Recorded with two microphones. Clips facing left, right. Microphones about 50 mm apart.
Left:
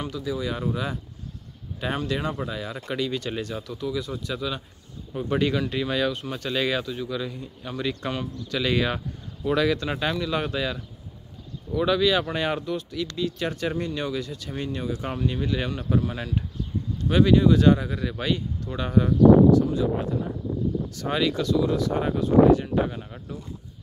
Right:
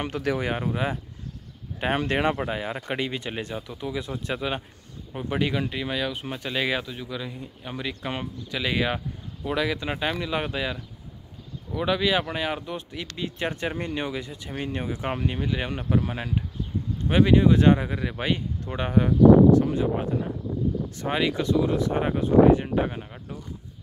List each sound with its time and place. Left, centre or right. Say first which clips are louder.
0.2 s speech: right 3 dB; right
1.8 s speech: right 3 dB; right
5.1 s a man's voice: left 2 dB; centre
12.4 s speech: left 2 dB; centre
12.6 s speech: left 5 dB; right
15.4 s speech: left 1 dB; centre
16.0 s speech: even; right
20.9 s speech: left 1 dB; right
23.0 s a man's voice: left 1 dB; centre